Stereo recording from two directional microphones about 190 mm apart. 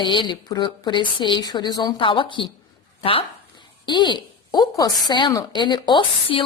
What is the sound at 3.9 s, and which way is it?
A woman's voice, 25° left (ahead or behind).